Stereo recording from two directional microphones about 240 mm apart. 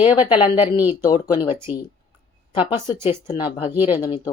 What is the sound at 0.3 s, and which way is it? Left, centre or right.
Speech, left.